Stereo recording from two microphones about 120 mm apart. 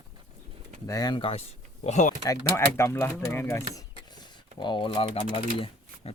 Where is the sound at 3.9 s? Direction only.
35° left (ahead or behind).